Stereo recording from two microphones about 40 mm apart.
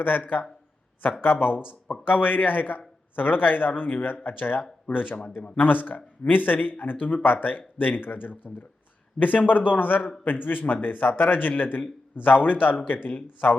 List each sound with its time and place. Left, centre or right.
1.2 s a man's voice: left